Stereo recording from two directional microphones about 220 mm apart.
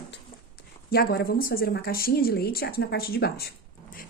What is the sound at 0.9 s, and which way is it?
Speech, 45° left (ahead or behind).